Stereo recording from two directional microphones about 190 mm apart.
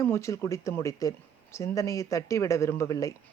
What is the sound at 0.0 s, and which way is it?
Speech, 15° left (ahead or behind).